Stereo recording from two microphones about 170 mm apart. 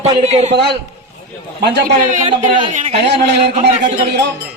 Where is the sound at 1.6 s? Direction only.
75° right (ahead or behind).